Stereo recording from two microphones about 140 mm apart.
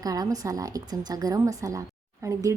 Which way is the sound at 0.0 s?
25° right (ahead or behind).